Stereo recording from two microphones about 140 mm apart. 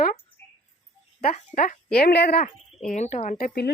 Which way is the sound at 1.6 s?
80° left.